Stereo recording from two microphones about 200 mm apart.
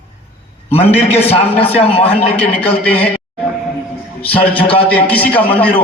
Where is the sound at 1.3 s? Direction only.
30° left (ahead or behind).